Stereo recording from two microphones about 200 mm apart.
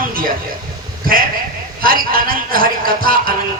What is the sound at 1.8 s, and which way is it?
Speech, 45° right (ahead or behind).